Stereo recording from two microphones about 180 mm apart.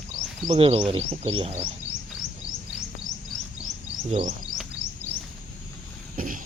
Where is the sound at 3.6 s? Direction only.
35° right (ahead or behind).